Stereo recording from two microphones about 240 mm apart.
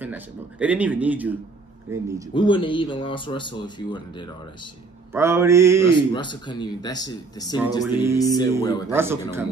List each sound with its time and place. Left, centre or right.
0.0 s speech: centre
2.3 s speech: centre
5.1 s speech: centre
5.9 s speech: centre
7.8 s speech: centre
8.2 s speech: centre
8.9 s speech: centre